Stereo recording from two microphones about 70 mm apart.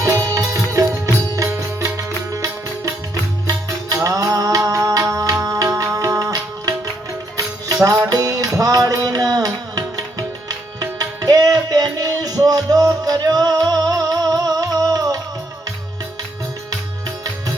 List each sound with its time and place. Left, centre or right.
0.0 s music: right
4.0 s music: right
8.1 s music: right